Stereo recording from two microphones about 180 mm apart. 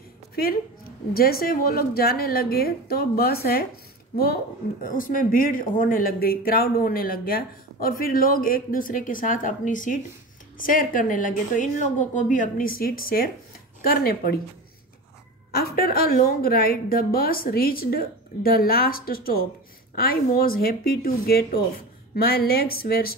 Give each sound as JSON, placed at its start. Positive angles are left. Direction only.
{"t": 1.1, "sound": "a woman's voice", "side_deg": 55}
{"t": 4.8, "sound": "a woman's voice", "side_deg": 50}
{"t": 15.5, "sound": "a sound", "side_deg": 60}
{"t": 15.9, "sound": "a woman's voice", "side_deg": 55}